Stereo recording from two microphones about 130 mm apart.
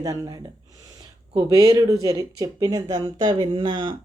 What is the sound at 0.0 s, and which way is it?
Speech, 30° right (ahead or behind).